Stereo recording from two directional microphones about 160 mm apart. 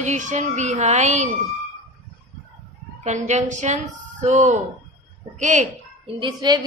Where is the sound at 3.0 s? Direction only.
45° right (ahead or behind).